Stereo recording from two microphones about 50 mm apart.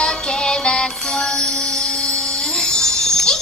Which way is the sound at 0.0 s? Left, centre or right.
Centre.